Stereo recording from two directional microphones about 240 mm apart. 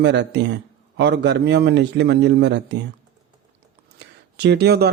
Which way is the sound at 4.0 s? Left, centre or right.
Right.